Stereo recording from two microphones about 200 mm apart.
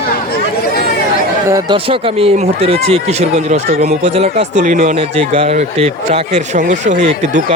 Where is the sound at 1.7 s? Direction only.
25° right (ahead or behind).